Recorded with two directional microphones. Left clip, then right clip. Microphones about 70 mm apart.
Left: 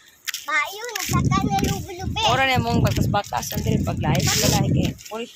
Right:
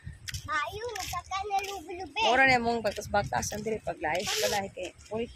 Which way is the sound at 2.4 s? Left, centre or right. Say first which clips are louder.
Left 3 dB; right.